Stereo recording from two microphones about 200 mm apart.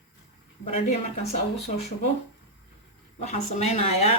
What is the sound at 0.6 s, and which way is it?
Speech, 35° left (ahead or behind).